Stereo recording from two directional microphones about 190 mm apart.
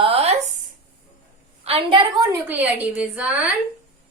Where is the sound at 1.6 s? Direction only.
30° right (ahead or behind).